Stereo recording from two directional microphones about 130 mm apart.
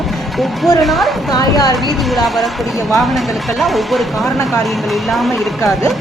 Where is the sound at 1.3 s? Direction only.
30° left (ahead or behind).